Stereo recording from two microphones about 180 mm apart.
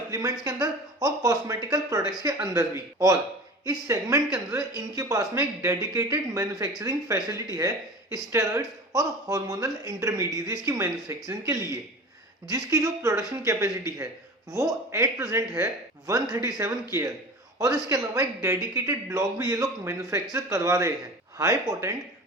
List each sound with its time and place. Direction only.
0.1 s speech: 20° right (ahead or behind)
3.7 s speech: 20° right (ahead or behind)